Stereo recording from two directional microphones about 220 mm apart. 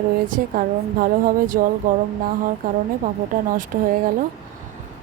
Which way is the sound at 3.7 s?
40° right (ahead or behind).